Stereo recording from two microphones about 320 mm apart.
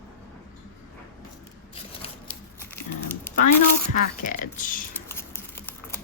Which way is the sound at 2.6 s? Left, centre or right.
Centre.